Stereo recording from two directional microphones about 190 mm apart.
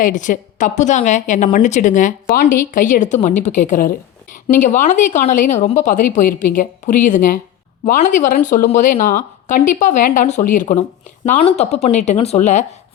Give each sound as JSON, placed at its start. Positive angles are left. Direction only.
{"t": 0.0, "sound": "a woman's voice", "side_deg": 40}